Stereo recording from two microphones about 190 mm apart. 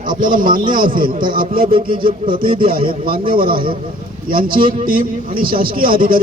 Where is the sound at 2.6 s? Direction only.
50° right (ahead or behind).